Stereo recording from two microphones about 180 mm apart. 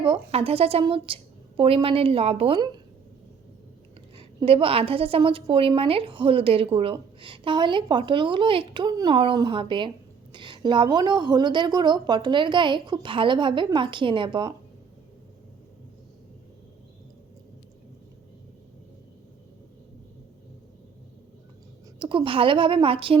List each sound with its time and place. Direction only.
0.0 s a woman's voice: 30° right (ahead or behind)
4.4 s a woman's voice: 30° right (ahead or behind)
21.9 s a woman's voice: 25° right (ahead or behind)